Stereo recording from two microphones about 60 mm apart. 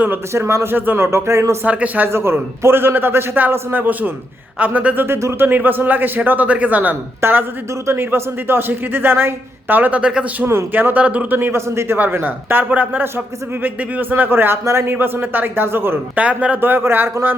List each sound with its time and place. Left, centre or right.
0.3 s speech: right
0.7 s speech: right
0.9 s speech: right
1.6 s a man's voice: right
2.0 s a man's voice: right
5.0 s speech: right
5.5 s a man's voice: right
7.2 s speech: right; by 10.2 s centre
10.7 s speech: right
11.7 s speech: right
11.9 s speech: right
14.9 s speech: right
16.1 s a man's voice: right
16.6 s speech: right